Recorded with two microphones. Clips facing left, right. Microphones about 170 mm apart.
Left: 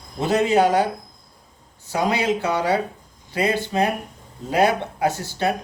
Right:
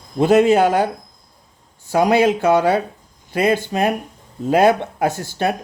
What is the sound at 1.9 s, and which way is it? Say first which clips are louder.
Speech: right 6 dB; 45° right (ahead or behind).